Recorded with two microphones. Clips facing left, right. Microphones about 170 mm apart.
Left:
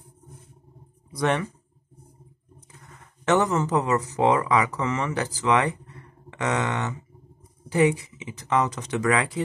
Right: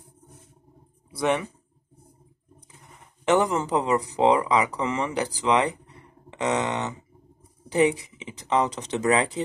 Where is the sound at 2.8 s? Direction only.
15° right (ahead or behind).